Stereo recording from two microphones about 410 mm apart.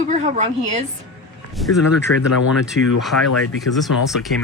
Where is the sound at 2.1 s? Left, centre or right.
Left.